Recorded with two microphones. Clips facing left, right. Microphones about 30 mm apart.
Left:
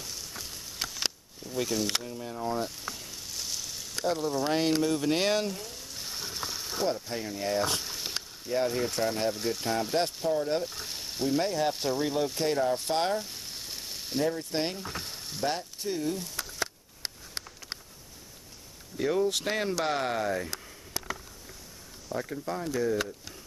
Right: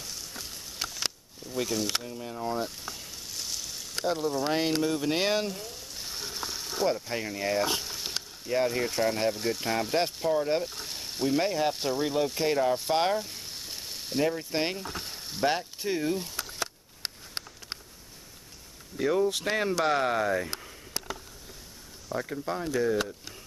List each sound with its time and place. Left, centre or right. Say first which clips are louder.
0.0 s a sound: even; centre
1.0 s speech: left 1 dB; centre
2.8 s sizzle: left 1 dB; centre
4.0 s speech: even; centre
10.6 s speech: even; centre
12.7 s frying: right 2 dB; centre
14.4 s speech: right 1 dB; centre
14.8 s frying: even; centre
15.4 s speech: right 4 dB; right
16.5 s a sound: left 1 dB; right
18.9 s speech: right 1 dB; centre
20.2 s speech: right 3 dB; centre
22.1 s speech: right 1 dB; centre